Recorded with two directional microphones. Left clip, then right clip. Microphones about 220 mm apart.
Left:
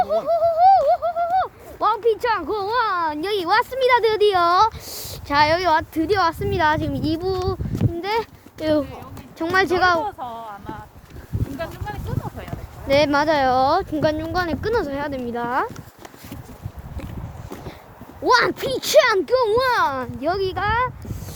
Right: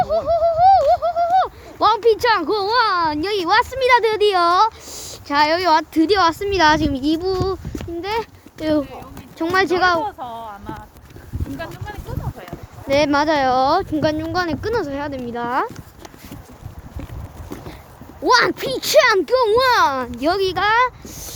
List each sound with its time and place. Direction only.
0.0 s pigeon: centre (ahead or behind)
3.2 s speech: centre (ahead or behind); by 7.0 s 15° right (ahead or behind)
7.0 s a sound: 5° right (ahead or behind)
8.0 s speech: 10° left (ahead or behind)
9.4 s speech: centre (ahead or behind)
11.5 s a sound: 40° left (ahead or behind)
12.9 s speech: centre (ahead or behind)
15.4 s speech: 5° right (ahead or behind)
18.3 s a child's voice: centre (ahead or behind); by 20.9 s 15° right (ahead or behind)